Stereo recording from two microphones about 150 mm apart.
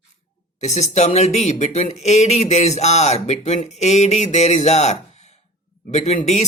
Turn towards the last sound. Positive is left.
turn(degrees=50)  # may be behind; listen again after turning